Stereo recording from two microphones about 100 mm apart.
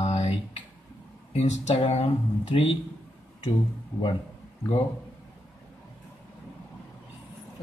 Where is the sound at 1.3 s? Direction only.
90° left.